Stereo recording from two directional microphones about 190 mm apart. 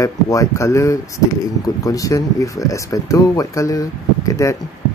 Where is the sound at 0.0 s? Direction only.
15° left (ahead or behind).